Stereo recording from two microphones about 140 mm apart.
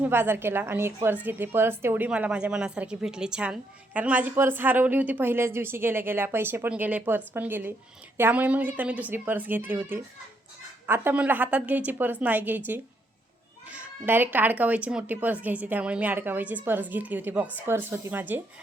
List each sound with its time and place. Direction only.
0.0 s speech: 15° right (ahead or behind)